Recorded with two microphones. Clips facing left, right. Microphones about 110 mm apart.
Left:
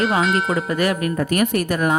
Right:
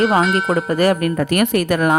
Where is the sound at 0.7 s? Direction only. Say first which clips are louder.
Right 6 dB; 40° right (ahead or behind).